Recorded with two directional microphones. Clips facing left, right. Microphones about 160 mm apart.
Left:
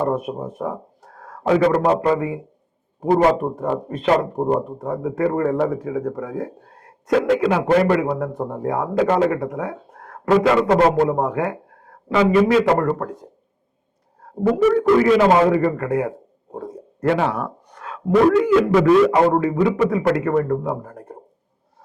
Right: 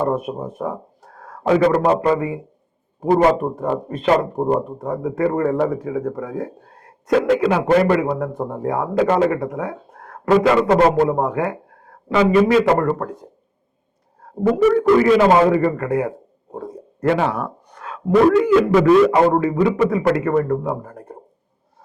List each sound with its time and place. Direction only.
0.3 s a man's voice: 25° right (ahead or behind)
3.9 s a man's voice: 15° right (ahead or behind)
14.4 s a man's voice: 15° right (ahead or behind)